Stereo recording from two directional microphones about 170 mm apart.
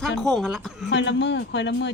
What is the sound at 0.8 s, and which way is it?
Speech, 90° left.